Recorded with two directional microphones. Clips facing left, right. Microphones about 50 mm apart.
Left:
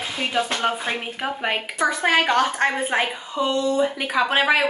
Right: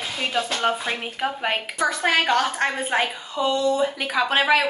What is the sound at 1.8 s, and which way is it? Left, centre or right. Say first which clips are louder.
A woman's voice: left 2 dB; centre.